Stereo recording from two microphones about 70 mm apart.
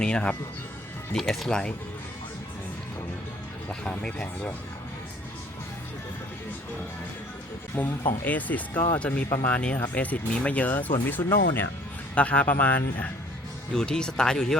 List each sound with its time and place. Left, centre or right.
0.0 s speech: centre
3.7 s speech: centre
7.8 s speech: left
13.7 s speech: centre